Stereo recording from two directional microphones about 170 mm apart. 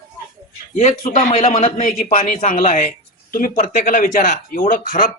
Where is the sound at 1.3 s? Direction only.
40° left (ahead or behind).